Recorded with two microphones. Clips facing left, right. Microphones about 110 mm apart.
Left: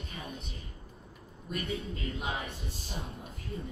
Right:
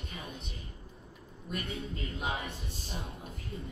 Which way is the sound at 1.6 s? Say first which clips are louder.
Left 3 dB; 30° right (ahead or behind).